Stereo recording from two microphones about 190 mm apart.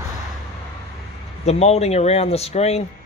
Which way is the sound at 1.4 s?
35° left (ahead or behind).